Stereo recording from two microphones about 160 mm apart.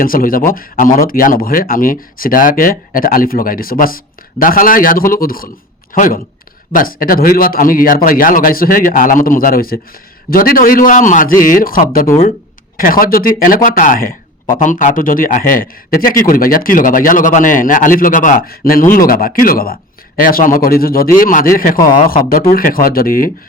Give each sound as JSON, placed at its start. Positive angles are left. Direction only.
{"t": 0.0, "sound": "a man's voice", "side_deg": 60}